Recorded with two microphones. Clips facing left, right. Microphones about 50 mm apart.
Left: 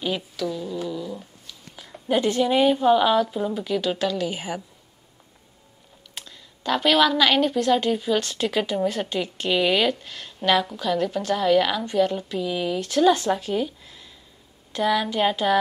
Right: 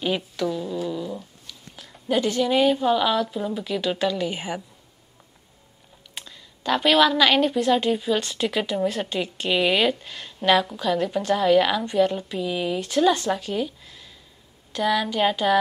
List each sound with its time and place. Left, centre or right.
0.0 s speech: centre
0.8 s a sound: centre
1.5 s a sound: centre
2.2 s a woman's voice: left
2.5 s a woman's voice: centre
6.1 s a woman's voice: centre
13.1 s a woman's voice: centre